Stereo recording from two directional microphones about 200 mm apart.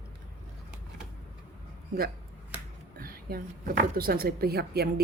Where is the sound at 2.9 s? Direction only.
45° right (ahead or behind).